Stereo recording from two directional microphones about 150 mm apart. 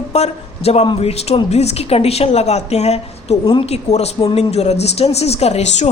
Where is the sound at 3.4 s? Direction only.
30° left (ahead or behind).